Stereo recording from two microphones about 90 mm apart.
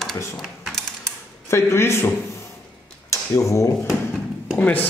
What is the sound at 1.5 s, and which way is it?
Speech, 30° left (ahead or behind).